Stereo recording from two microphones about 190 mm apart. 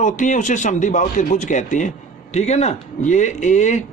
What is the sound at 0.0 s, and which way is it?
Speech, 40° left (ahead or behind).